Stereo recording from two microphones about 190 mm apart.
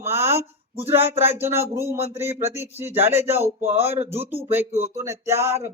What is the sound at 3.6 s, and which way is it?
Speech, 35° right (ahead or behind).